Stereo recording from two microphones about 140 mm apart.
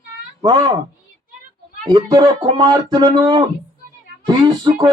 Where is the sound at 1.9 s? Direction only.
25° right (ahead or behind).